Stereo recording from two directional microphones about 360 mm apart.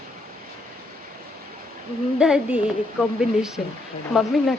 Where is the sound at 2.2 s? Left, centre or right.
Centre.